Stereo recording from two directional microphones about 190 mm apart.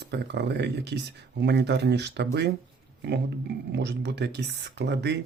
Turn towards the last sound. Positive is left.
turn(degrees=-60)  # may be behind; listen again after turning